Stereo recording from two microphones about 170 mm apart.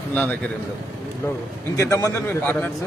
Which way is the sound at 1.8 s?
20° left (ahead or behind).